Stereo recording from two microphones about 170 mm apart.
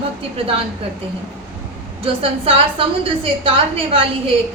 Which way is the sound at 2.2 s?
35° right (ahead or behind).